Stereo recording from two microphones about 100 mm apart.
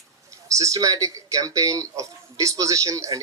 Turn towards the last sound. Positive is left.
turn(degrees=-35)  # may be behind; listen again after turning